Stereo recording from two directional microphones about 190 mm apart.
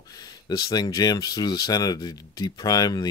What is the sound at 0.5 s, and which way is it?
Speech, 20° left (ahead or behind).